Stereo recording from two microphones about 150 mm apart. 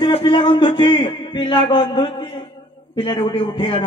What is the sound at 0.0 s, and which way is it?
A man's voice, 30° left (ahead or behind).